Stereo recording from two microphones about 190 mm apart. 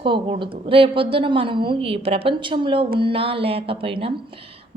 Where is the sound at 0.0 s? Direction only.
25° right (ahead or behind).